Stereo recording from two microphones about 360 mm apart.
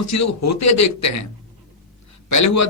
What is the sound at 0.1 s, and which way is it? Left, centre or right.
A man's voice, left.